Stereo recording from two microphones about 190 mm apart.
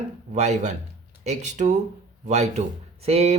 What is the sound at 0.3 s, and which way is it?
Speech, 35° right (ahead or behind).